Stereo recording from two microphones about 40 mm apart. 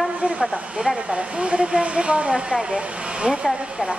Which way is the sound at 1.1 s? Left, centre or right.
Right.